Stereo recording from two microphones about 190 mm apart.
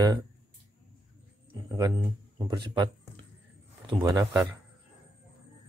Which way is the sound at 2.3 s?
25° right (ahead or behind).